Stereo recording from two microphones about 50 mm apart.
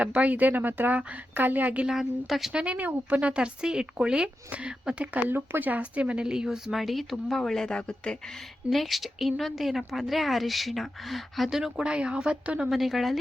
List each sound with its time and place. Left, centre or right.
0.0 s speech: right
1.9 s a woman's voice: centre
2.5 s speech: centre
5.3 s speech: right; by 6.6 s centre
6.7 s a woman's voice: centre
7.6 s speech: left
8.7 s a woman's voice: centre
12.7 s a woman's voice: centre